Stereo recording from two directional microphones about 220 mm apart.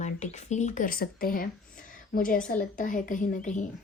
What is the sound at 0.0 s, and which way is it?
Speech, 30° left (ahead or behind).